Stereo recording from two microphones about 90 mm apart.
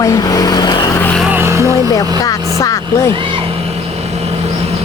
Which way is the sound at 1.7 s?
40° left (ahead or behind).